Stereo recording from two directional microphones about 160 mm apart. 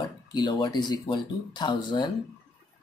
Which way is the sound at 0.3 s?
30° left (ahead or behind).